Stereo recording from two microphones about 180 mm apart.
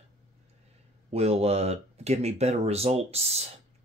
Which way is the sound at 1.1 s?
35° right (ahead or behind).